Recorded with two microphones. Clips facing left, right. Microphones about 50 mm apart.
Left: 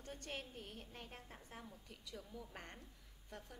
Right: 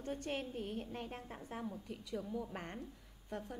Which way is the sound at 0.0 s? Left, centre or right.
Centre.